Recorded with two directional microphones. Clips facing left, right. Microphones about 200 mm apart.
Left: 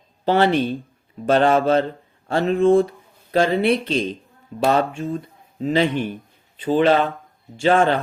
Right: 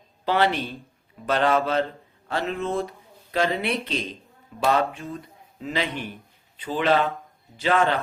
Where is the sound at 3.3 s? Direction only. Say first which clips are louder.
Left 7 dB; 35° left (ahead or behind).